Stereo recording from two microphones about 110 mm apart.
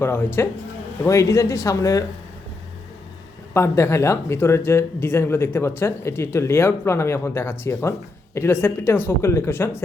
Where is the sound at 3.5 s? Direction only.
25° left (ahead or behind).